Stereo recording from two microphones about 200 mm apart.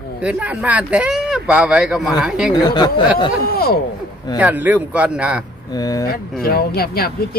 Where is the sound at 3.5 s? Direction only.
50° left (ahead or behind).